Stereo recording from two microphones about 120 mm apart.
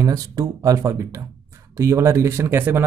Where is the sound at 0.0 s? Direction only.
30° right (ahead or behind).